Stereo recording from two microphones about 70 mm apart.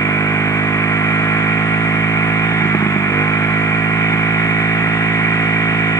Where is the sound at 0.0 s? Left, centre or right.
Left.